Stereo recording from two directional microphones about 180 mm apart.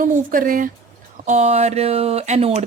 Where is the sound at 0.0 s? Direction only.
45° right (ahead or behind).